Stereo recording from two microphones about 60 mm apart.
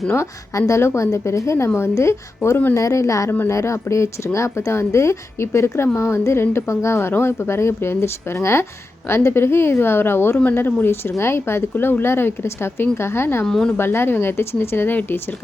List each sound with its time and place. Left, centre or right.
0.1 s a woman's voice: left
13.4 s a woman's voice: centre
13.7 s speech: left